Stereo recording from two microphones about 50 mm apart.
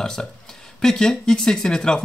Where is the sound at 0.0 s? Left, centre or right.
Centre.